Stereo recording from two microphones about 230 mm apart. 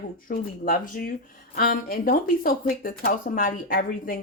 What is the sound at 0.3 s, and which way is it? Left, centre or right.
Speech, left.